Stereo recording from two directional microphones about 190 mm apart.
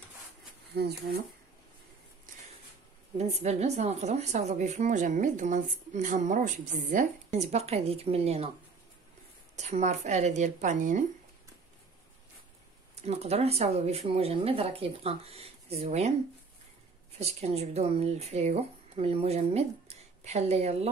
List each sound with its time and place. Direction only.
0.7 s speech: 60° right (ahead or behind)
3.2 s speech: 35° right (ahead or behind)
9.6 s speech: 35° right (ahead or behind)
13.0 s speech: 35° right (ahead or behind)
17.2 s speech: 35° right (ahead or behind)